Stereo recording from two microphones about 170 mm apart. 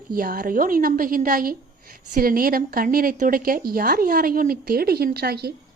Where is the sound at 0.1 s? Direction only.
60° right (ahead or behind).